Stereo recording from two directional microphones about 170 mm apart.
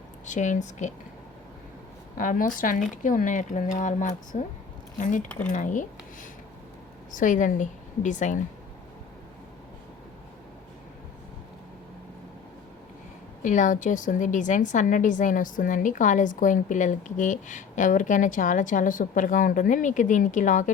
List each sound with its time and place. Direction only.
0.3 s a woman's voice: 45° left (ahead or behind)
2.1 s a woman's voice: 55° left (ahead or behind)
7.1 s a woman's voice: 50° left (ahead or behind)
13.4 s a woman's voice: 50° left (ahead or behind)